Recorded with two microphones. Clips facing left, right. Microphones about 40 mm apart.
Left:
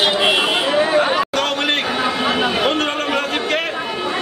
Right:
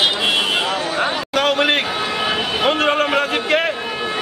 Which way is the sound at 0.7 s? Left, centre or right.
Left.